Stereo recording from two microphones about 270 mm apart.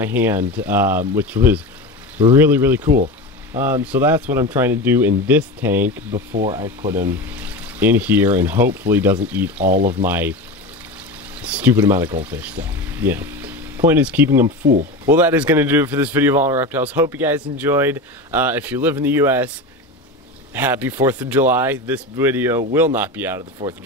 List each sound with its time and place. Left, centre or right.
0.0 s speech: centre
11.4 s speech: centre
14.6 s speech: right
15.0 s speech: centre
20.5 s speech: centre